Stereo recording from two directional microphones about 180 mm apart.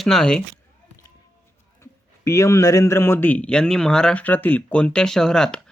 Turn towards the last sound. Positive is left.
turn(degrees=5)  # may be behind; listen again after turning